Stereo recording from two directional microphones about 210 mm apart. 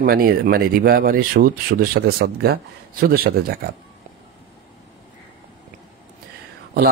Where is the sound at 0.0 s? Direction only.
45° right (ahead or behind).